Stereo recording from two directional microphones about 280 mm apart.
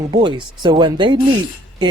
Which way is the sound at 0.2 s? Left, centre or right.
Centre.